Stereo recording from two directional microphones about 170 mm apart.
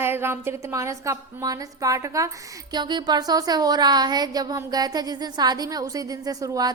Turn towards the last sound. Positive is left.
turn(degrees=-20)  # may be behind; listen again after turning